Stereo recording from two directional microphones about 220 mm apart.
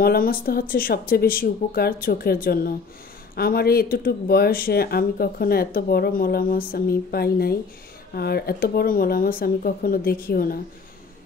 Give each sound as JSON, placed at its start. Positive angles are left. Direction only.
{"t": 0.0, "sound": "speech", "side_deg": 40}